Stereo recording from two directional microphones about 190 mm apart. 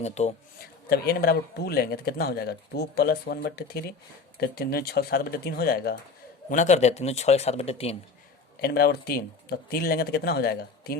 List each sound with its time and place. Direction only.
0.0 s speech: 35° left (ahead or behind)
0.6 s speech: 55° left (ahead or behind)
6.5 s speech: 40° left (ahead or behind)
8.6 s speech: 55° left (ahead or behind)